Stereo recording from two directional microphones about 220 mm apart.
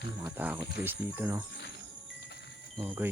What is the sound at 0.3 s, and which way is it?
Speech, 5° right (ahead or behind).